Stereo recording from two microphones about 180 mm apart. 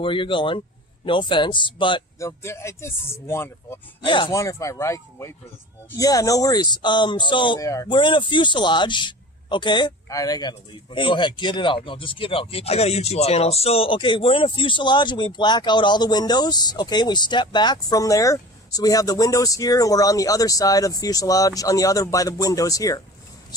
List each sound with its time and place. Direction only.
0.0 s speech: 30° left (ahead or behind)
4.0 s speech: 25° left (ahead or behind)